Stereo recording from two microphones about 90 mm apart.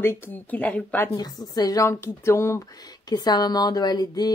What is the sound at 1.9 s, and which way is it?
Speech, 30° left (ahead or behind).